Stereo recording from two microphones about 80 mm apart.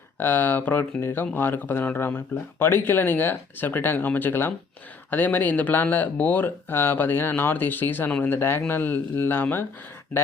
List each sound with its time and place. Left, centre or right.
0.2 s speech: left